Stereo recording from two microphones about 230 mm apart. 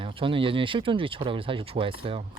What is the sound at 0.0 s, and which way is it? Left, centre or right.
Speech, right.